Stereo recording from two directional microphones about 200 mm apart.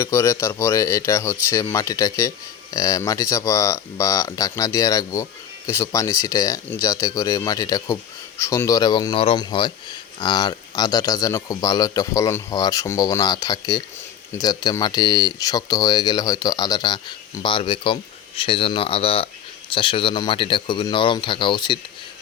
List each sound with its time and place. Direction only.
0.0 s a man's voice: 15° left (ahead or behind)